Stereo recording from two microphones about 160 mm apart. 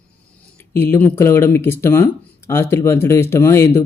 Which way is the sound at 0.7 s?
10° left (ahead or behind).